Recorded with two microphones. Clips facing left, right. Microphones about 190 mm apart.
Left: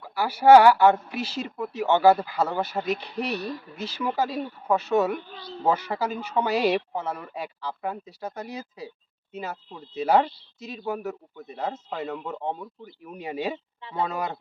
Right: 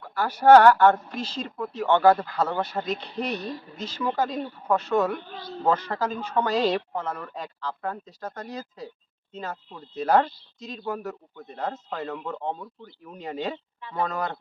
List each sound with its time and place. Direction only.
0.0 s speech: 5° left (ahead or behind)
5.3 s speech: 50° right (ahead or behind)
5.6 s speech: 5° left (ahead or behind)